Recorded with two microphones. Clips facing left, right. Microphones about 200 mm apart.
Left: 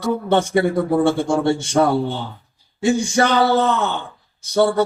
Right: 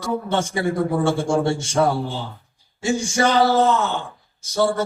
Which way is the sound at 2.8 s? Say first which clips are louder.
Left 3 dB; 60° left (ahead or behind).